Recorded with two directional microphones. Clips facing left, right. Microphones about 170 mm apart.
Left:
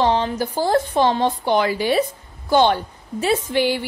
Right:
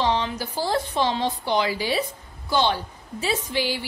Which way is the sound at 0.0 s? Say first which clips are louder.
Left 5 dB; 50° left (ahead or behind).